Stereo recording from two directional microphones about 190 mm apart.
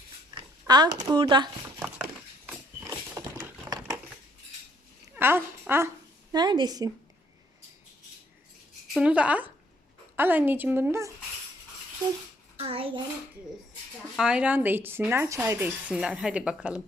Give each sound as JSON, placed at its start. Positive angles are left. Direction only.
{"t": 0.3, "sound": "speech", "side_deg": -20}
{"t": 2.5, "sound": "a sound", "side_deg": -10}
{"t": 5.1, "sound": "a sound", "side_deg": -10}
{"t": 6.3, "sound": "speech", "side_deg": -20}
{"t": 8.9, "sound": "speech", "side_deg": -5}
{"t": 12.5, "sound": "a child's voice", "side_deg": -30}
{"t": 14.2, "sound": "speech", "side_deg": -5}